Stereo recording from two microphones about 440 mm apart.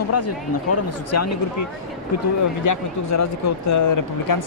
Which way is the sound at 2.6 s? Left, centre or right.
Left.